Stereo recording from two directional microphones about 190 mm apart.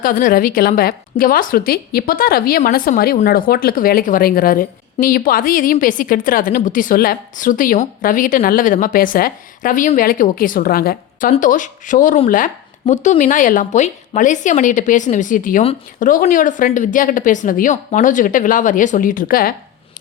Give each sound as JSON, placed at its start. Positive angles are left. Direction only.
{"t": 0.0, "sound": "a woman's voice", "side_deg": 45}